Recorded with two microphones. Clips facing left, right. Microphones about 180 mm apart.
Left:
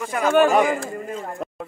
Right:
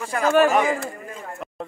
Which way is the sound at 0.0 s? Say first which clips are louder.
Left 1 dB; centre (ahead or behind).